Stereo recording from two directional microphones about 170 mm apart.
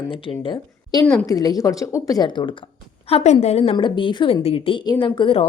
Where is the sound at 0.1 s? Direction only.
30° left (ahead or behind).